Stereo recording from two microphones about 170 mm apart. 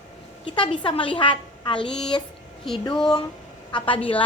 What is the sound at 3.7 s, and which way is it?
Speech, 30° left (ahead or behind).